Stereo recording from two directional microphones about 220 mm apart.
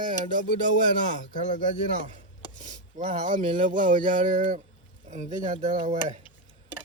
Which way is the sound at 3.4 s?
20° right (ahead or behind).